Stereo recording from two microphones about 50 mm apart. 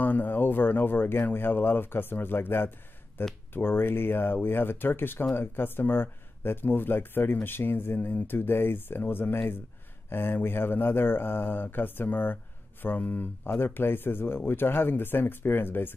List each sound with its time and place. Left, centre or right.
0.0 s speech: left